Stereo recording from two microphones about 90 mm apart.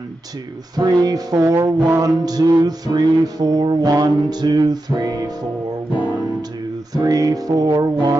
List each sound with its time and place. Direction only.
0.7 s music: 45° right (ahead or behind)
1.5 s a sound: 30° right (ahead or behind)
2.0 s music: 45° right (ahead or behind)
6.9 s music: 45° right (ahead or behind)